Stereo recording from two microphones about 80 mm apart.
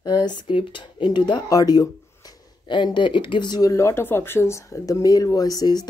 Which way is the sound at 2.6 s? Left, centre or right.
Left.